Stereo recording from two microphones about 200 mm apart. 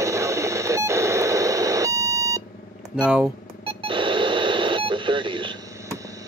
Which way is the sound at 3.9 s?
25° right (ahead or behind).